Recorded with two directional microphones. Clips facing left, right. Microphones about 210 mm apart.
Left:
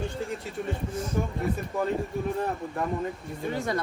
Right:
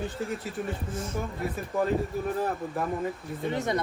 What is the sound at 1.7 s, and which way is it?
Speech, centre (ahead or behind).